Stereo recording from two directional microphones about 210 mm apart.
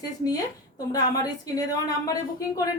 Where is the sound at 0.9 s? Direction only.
15° left (ahead or behind).